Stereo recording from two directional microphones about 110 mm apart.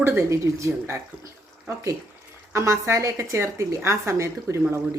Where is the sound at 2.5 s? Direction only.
25° right (ahead or behind).